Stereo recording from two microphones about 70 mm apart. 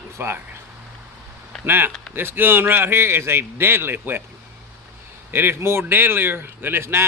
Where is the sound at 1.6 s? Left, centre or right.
Right.